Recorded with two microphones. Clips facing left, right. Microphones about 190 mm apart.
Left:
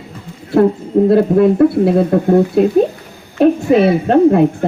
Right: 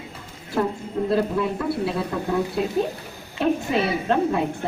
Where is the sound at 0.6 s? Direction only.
65° left (ahead or behind).